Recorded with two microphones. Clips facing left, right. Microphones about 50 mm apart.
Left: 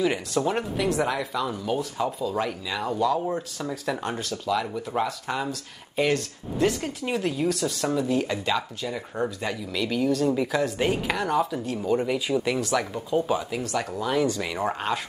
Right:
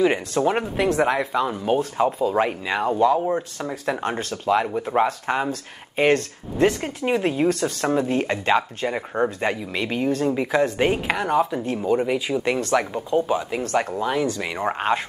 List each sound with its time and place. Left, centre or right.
0.0 s speech: right
11.6 s speech: right
11.9 s speech: centre
13.1 s speech: centre
13.6 s speech: right
14.4 s speech: right